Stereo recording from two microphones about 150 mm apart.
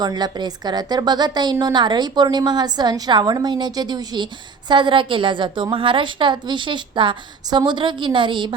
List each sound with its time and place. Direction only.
0.0 s a woman's voice: 25° right (ahead or behind)